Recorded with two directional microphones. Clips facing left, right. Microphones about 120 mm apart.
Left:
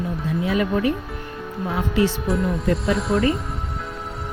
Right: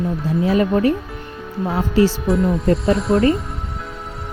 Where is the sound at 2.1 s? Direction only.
Centre (ahead or behind).